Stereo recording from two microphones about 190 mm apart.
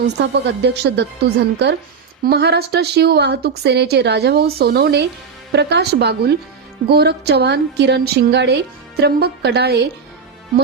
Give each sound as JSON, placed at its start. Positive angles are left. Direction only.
{"t": 0.2, "sound": "speech", "side_deg": -65}